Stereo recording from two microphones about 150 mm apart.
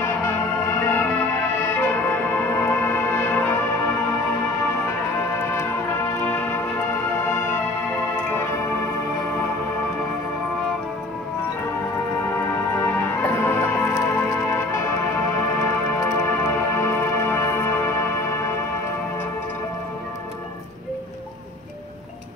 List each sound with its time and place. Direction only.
0.7 s music: 10° left (ahead or behind)
6.2 s music: 10° left (ahead or behind)
12.4 s music: 15° left (ahead or behind)
16.0 s music: 15° left (ahead or behind)